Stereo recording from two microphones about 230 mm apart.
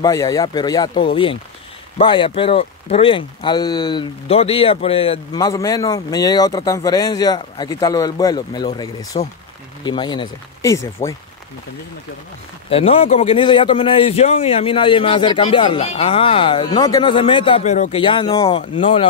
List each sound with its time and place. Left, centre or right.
0.0 s speech: centre
12.6 s a man's voice: left